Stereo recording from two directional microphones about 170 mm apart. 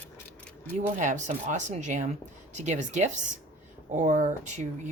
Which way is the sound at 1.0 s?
45° right (ahead or behind).